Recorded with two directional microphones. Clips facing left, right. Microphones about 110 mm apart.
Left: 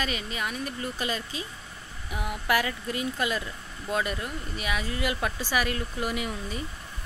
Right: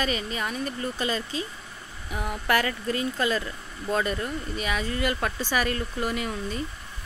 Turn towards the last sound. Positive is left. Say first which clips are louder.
# right 2 dB
turn(degrees=5)  # may be behind; listen again after turning